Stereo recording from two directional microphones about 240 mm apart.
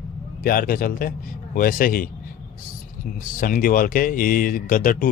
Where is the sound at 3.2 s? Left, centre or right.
Left.